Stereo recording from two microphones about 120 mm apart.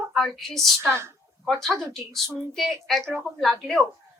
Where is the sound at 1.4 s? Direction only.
Centre (ahead or behind).